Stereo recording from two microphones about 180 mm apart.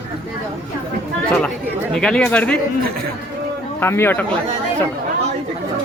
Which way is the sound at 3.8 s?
15° left (ahead or behind).